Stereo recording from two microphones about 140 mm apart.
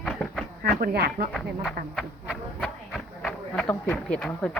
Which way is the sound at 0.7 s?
90° right.